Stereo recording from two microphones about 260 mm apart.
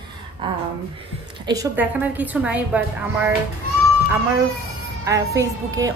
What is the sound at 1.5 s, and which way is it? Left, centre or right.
A woman's voice, centre.